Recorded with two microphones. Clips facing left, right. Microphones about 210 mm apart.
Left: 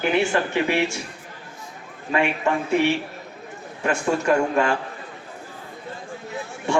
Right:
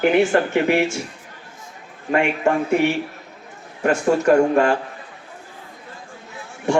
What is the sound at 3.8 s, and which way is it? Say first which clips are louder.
Speech: right 5 dB; 40° right (ahead or behind).